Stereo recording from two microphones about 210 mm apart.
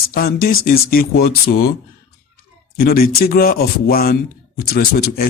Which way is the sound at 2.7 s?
45° left (ahead or behind).